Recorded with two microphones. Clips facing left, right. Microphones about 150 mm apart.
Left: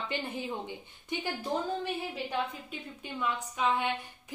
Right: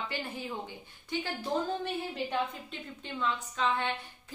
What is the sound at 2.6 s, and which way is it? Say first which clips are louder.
A woman's voice: even; 10° left (ahead or behind).